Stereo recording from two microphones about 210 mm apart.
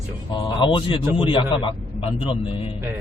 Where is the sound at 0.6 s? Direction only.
25° left (ahead or behind).